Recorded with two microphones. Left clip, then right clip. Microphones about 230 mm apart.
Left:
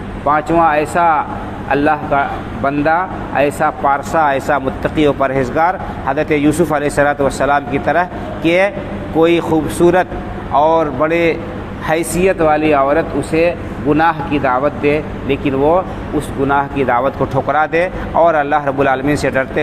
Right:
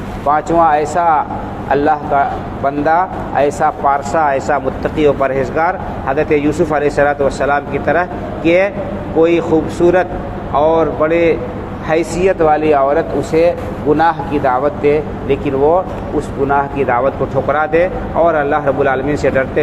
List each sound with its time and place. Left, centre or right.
0.3 s speech: left